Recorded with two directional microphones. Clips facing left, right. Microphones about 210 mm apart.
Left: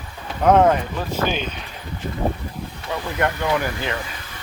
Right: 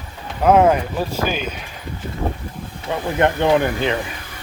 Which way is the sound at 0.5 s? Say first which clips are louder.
Right 2 dB; 10° right (ahead or behind).